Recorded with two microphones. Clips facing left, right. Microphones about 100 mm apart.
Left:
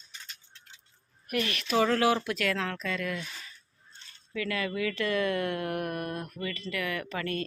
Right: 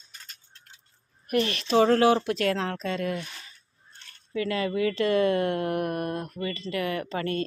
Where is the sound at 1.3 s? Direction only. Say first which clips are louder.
Right 5 dB; 30° right (ahead or behind).